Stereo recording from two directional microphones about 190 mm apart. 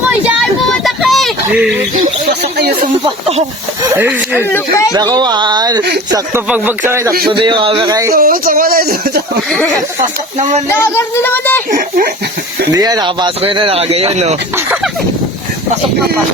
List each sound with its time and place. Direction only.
0.1 s a sound: 10° right (ahead or behind)
1.5 s speech: 10° right (ahead or behind)
2.4 s speech: 55° right (ahead or behind)
3.8 s speech: 10° right (ahead or behind)
4.4 s speech: 10° left (ahead or behind)
4.9 s speech: 20° right (ahead or behind)
7.3 s speech: 25° right (ahead or behind)
8.1 s speech: 50° right (ahead or behind)
9.5 s speech: 5° left (ahead or behind)
11.7 s speech: 45° right (ahead or behind)
12.7 s speech: 20° right (ahead or behind)
14.5 s speech: 10° right (ahead or behind)